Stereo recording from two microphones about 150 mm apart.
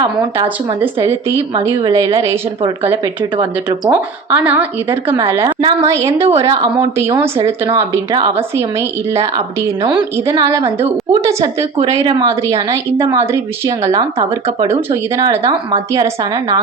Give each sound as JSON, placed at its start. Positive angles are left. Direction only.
{"t": 1.8, "sound": "a woman's voice", "side_deg": -25}
{"t": 4.9, "sound": "speech", "side_deg": -35}
{"t": 5.2, "sound": "speech", "side_deg": -15}
{"t": 5.5, "sound": "speech", "side_deg": -30}
{"t": 5.9, "sound": "a woman's voice", "side_deg": -20}
{"t": 6.1, "sound": "speech", "side_deg": -40}
{"t": 6.4, "sound": "a woman's voice", "side_deg": -20}
{"t": 14.3, "sound": "speech", "side_deg": -35}
{"t": 14.7, "sound": "a woman's voice", "side_deg": -20}